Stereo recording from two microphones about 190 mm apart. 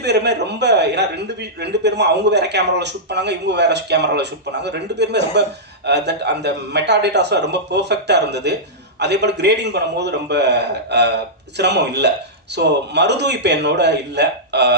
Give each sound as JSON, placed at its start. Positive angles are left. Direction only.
{"t": 0.0, "sound": "a man's voice", "side_deg": -60}